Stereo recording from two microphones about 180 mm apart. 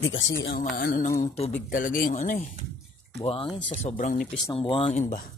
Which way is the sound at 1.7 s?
50° left (ahead or behind).